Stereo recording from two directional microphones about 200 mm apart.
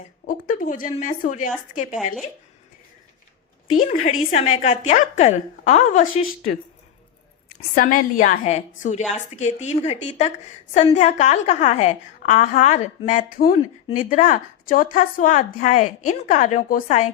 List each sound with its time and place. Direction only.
0.3 s a woman's voice: 40° left (ahead or behind)
3.8 s a woman's voice: 35° left (ahead or behind)
7.8 s a woman's voice: 40° left (ahead or behind)